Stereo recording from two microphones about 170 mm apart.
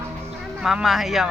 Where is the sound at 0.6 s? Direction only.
5° right (ahead or behind).